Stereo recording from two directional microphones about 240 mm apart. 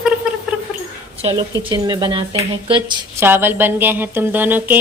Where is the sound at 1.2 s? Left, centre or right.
Right.